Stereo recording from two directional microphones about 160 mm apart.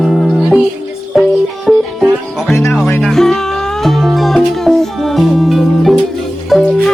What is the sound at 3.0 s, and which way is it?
Music, 5° left (ahead or behind).